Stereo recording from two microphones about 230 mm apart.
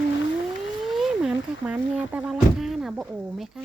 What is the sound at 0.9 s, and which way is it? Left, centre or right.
Speech, centre.